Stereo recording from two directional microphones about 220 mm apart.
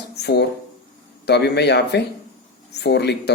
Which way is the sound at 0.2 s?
50° left (ahead or behind).